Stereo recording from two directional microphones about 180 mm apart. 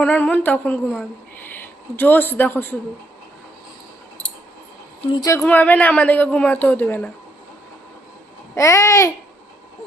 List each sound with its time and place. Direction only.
0.0 s speech: 10° left (ahead or behind)
5.1 s a woman's voice: 20° left (ahead or behind)
5.4 s speech: 10° left (ahead or behind)
8.5 s speech: 15° left (ahead or behind)